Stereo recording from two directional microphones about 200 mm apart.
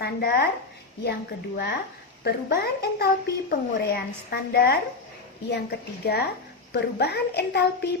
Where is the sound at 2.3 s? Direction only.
50° left (ahead or behind).